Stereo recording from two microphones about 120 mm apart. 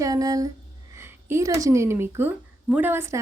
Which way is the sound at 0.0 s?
30° right (ahead or behind).